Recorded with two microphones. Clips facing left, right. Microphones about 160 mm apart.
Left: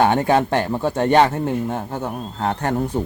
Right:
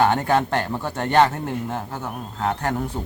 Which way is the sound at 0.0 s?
25° left (ahead or behind).